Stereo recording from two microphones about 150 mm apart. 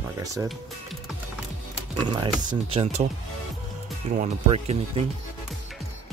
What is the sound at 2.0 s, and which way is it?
Speech, 35° right (ahead or behind).